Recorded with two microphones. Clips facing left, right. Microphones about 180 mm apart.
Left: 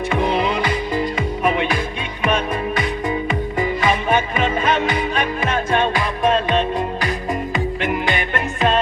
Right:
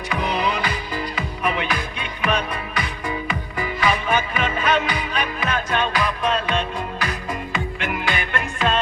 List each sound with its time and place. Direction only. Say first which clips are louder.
0.1 s music: left 3 dB; 25° left (ahead or behind)